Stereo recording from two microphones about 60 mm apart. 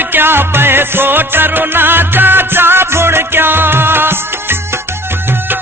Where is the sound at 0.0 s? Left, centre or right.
Right.